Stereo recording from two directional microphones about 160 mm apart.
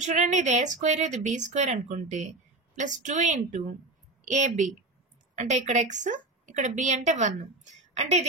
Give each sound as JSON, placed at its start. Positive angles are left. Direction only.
{"t": 0.0, "sound": "a woman's voice", "side_deg": -50}